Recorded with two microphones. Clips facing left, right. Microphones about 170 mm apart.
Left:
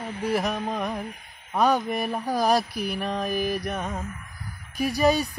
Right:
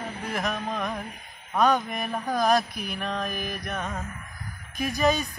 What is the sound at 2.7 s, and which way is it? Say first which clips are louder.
Mantra: left 5 dB; 35° left (ahead or behind).